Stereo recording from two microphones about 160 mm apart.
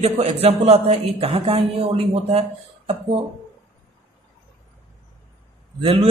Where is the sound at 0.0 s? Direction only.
40° right (ahead or behind).